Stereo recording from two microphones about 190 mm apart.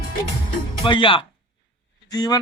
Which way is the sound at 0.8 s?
25° left (ahead or behind).